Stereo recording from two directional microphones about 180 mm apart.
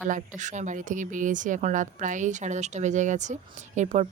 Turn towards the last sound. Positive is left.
turn(degrees=-40)  # may be behind; listen again after turning